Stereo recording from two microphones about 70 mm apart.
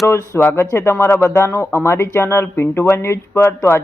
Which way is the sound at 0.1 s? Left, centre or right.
Left.